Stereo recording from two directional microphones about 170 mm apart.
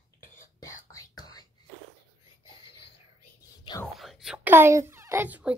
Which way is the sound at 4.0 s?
Centre (ahead or behind).